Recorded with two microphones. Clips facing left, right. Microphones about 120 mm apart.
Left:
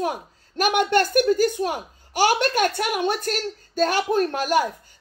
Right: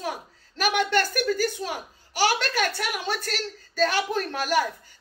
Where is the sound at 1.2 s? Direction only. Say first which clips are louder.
Left 7 dB; 50° left (ahead or behind).